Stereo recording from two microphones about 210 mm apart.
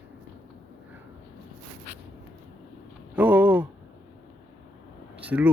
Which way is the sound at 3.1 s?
5° right (ahead or behind).